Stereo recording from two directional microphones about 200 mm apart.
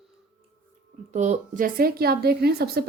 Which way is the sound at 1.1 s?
35° right (ahead or behind).